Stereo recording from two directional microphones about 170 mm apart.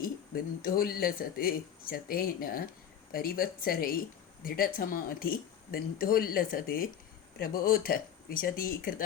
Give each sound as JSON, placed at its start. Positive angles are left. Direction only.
{"t": 0.0, "sound": "speech", "side_deg": 55}